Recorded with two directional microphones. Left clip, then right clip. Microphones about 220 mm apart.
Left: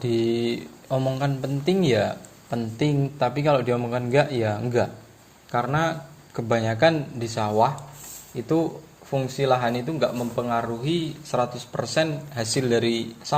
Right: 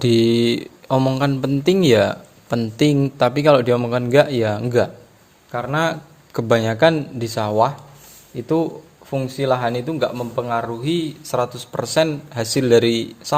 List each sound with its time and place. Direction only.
0.0 s a man's voice: 50° right (ahead or behind)
8.4 s a man's voice: 30° right (ahead or behind)